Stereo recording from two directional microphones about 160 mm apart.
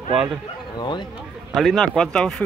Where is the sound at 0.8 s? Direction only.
30° left (ahead or behind).